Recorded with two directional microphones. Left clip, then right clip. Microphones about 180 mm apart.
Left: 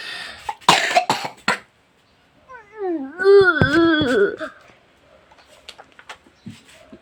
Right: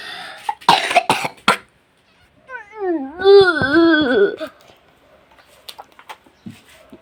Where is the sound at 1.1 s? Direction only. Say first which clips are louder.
Right 5 dB; 25° right (ahead or behind).